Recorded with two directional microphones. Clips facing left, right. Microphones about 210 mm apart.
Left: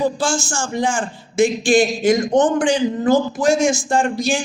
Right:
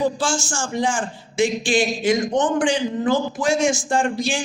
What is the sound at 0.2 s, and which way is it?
A man's voice, 45° left (ahead or behind).